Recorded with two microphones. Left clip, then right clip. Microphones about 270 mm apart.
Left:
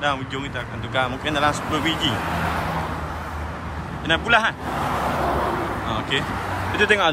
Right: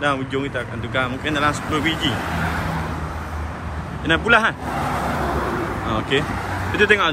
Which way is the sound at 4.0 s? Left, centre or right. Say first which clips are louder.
Right 2 dB; centre.